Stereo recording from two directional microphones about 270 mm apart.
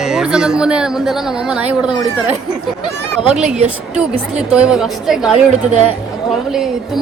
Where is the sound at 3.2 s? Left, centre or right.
Centre.